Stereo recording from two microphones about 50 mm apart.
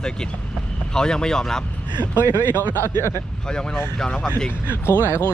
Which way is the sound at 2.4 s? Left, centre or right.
Left.